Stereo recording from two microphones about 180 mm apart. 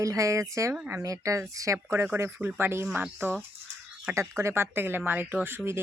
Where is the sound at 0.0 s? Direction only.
15° right (ahead or behind).